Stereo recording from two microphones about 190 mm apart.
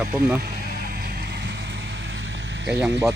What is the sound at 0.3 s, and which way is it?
Vehicle, 55° right (ahead or behind).